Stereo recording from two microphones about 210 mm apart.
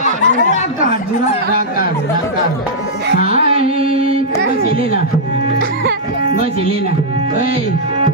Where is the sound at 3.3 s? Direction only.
30° right (ahead or behind).